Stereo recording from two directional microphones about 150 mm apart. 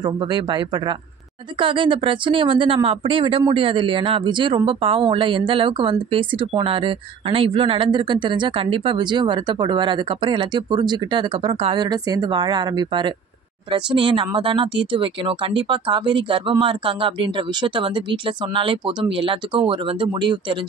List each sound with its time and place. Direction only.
0.0 s speech: 30° right (ahead or behind)